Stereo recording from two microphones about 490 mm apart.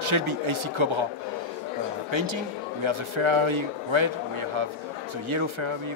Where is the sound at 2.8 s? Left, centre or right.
Right.